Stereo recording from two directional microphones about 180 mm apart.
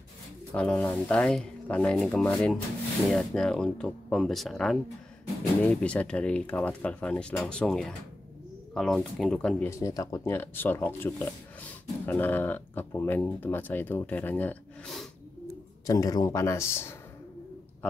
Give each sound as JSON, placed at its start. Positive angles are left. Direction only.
{"t": 0.6, "sound": "speech", "side_deg": 5}
{"t": 9.7, "sound": "speech", "side_deg": 15}
{"t": 15.9, "sound": "speech", "side_deg": 20}